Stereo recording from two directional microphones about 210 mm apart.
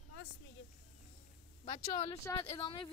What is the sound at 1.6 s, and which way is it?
A woman's voice, 30° left (ahead or behind).